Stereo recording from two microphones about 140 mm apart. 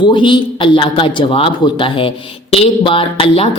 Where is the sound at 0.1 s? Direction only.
35° left (ahead or behind).